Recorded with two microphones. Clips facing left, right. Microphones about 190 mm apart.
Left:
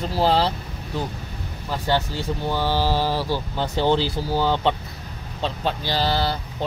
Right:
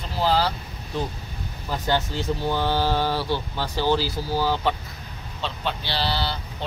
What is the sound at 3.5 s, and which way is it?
Speech, 25° left (ahead or behind).